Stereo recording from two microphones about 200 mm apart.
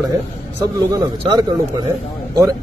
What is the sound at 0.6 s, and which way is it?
A man's voice, 15° right (ahead or behind).